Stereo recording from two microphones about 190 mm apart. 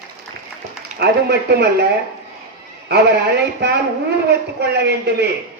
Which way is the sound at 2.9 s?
60° right (ahead or behind).